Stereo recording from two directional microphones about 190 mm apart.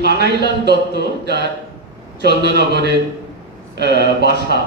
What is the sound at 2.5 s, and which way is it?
Speech, 60° right (ahead or behind).